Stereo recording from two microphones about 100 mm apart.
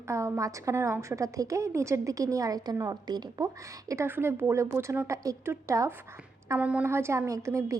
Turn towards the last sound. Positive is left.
turn(degrees=-30)  # may be behind; listen again after turning